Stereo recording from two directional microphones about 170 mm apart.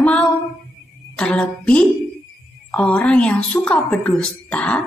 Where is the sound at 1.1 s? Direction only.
5° left (ahead or behind).